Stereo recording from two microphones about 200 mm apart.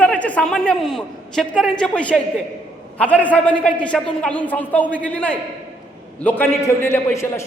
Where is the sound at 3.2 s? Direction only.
5° left (ahead or behind).